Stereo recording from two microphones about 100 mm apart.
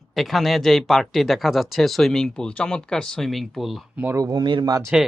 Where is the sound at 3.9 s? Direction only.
20° right (ahead or behind).